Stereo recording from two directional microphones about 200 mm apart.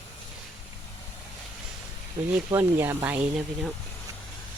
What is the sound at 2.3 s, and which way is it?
Speech, 10° right (ahead or behind).